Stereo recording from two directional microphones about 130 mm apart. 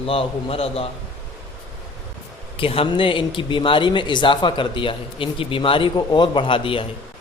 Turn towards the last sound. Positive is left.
turn(degrees=45)  # may be behind; listen again after turning